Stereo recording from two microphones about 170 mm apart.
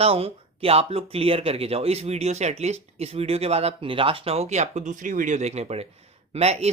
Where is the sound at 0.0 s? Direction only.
35° right (ahead or behind).